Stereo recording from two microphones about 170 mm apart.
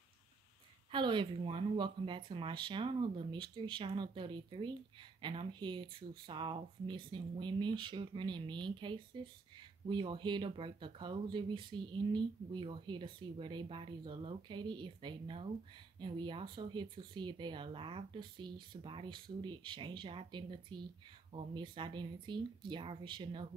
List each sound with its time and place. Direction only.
0.9 s speech: 30° right (ahead or behind)